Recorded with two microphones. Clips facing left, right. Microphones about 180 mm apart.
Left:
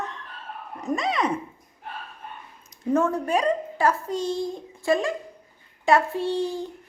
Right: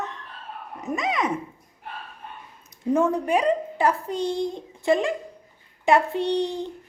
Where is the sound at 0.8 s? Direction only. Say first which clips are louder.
Left 2 dB; 5° right (ahead or behind).